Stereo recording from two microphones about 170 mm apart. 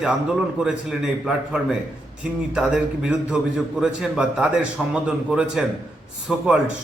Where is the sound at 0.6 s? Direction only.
5° right (ahead or behind).